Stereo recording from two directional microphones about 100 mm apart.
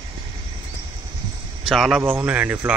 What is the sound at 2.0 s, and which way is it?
Speech, 20° right (ahead or behind).